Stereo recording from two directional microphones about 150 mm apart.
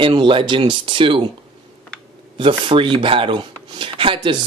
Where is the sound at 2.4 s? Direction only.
35° right (ahead or behind).